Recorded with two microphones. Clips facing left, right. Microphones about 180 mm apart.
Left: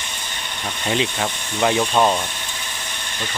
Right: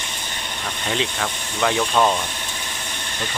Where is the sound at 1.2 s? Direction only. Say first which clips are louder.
Left 2 dB; 15° left (ahead or behind).